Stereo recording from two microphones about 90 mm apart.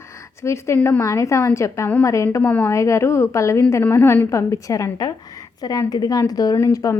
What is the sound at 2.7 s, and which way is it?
A woman's voice, 35° left (ahead or behind).